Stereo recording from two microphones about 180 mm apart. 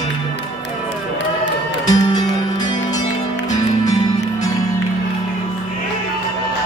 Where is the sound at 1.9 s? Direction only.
25° left (ahead or behind).